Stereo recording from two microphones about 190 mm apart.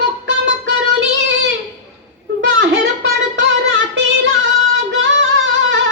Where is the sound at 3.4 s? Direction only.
70° right (ahead or behind).